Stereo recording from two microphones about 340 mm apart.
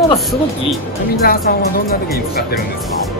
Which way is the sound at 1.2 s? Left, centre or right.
Left.